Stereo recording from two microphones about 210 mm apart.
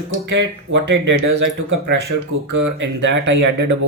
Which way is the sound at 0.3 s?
60° right (ahead or behind).